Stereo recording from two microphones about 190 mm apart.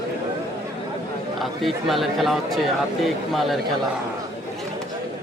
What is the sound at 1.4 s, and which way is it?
Speech, centre (ahead or behind).